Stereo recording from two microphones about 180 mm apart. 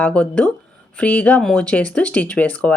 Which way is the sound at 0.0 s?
5° left (ahead or behind).